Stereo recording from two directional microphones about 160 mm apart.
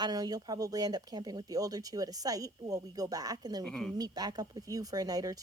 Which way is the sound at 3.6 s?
5° left (ahead or behind).